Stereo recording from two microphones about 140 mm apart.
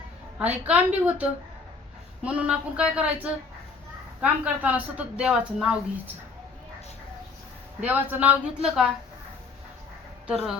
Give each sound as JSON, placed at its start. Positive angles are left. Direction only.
{"t": 0.3, "sound": "speech", "side_deg": -10}
{"t": 4.2, "sound": "speech", "side_deg": -10}
{"t": 7.9, "sound": "speech", "side_deg": -10}
{"t": 10.2, "sound": "speech", "side_deg": -5}